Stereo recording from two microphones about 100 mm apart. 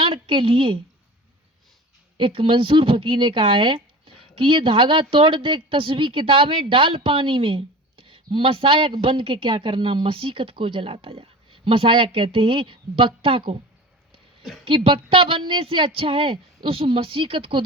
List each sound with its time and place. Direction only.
0.0 s speech: 60° right (ahead or behind)
2.1 s speech: 55° right (ahead or behind)
14.6 s speech: 60° right (ahead or behind)